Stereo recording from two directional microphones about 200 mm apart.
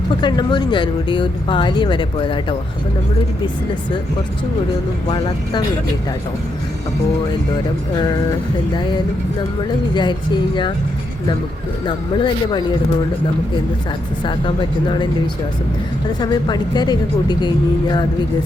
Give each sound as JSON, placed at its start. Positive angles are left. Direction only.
{"t": 0.2, "sound": "speech", "side_deg": 20}
{"t": 5.0, "sound": "speech", "side_deg": 25}
{"t": 7.9, "sound": "speech", "side_deg": 20}
{"t": 9.9, "sound": "speech", "side_deg": 25}
{"t": 11.9, "sound": "speech", "side_deg": 25}
{"t": 14.3, "sound": "speech", "side_deg": 25}
{"t": 16.2, "sound": "speech", "side_deg": 20}